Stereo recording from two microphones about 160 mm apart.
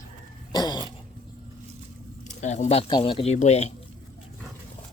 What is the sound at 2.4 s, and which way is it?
Speech, 45° left (ahead or behind).